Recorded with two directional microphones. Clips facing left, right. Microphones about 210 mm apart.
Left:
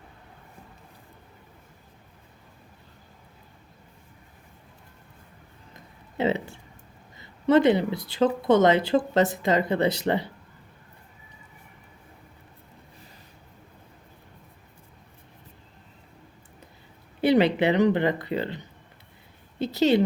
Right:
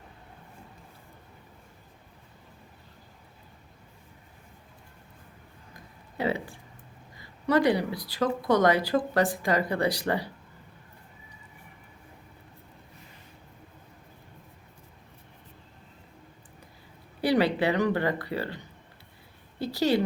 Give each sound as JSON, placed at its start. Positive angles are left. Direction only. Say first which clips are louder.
{"t": 5.7, "sound": "a sound", "louder": "left 4 dB", "side_deg": 25}
{"t": 7.2, "sound": "speech", "louder": "left 5 dB", "side_deg": 25}
{"t": 17.2, "sound": "a woman's voice", "louder": "left 4 dB", "side_deg": 20}